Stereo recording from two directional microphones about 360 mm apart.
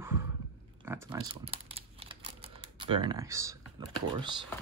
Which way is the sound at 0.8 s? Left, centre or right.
Centre.